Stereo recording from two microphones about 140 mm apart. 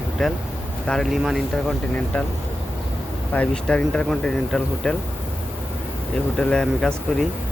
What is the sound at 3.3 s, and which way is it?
Speech, 10° left (ahead or behind).